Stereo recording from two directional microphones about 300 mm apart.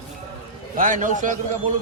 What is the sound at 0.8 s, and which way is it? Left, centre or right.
Speech, right.